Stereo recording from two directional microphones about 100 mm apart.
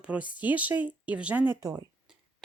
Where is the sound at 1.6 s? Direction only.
40° right (ahead or behind).